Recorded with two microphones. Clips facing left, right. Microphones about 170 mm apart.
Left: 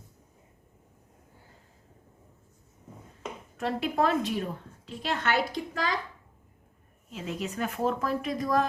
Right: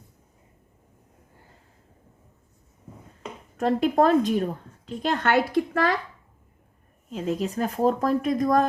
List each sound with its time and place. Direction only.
3.6 s a woman's voice: 45° right (ahead or behind)
7.1 s speech: 40° right (ahead or behind)